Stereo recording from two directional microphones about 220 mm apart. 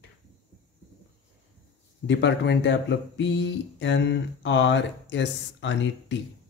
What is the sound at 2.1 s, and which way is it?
Speech, 55° left (ahead or behind).